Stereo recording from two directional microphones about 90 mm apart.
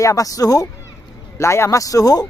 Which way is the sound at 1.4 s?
30° left (ahead or behind).